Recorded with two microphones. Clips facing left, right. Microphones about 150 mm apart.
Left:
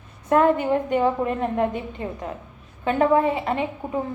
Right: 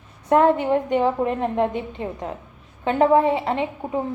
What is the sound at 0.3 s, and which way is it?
A woman's voice, 20° right (ahead or behind).